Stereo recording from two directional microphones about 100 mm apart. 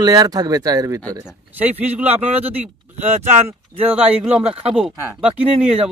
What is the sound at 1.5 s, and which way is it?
Speech, 20° right (ahead or behind).